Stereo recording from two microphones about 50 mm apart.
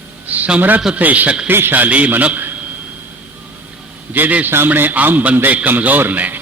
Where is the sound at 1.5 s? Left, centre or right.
Right.